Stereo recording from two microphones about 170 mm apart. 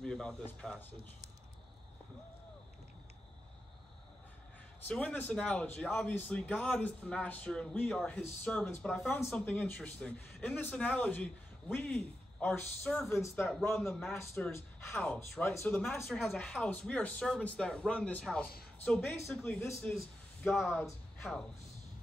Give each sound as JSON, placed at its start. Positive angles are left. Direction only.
{"t": 0.0, "sound": "speech", "side_deg": 5}
{"t": 4.8, "sound": "a man's voice", "side_deg": 10}
{"t": 13.1, "sound": "a man's voice", "side_deg": 15}
{"t": 14.5, "sound": "a man's voice", "side_deg": 10}